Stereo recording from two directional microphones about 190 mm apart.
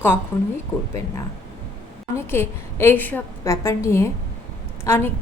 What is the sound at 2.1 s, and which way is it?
A woman's voice, 15° left (ahead or behind).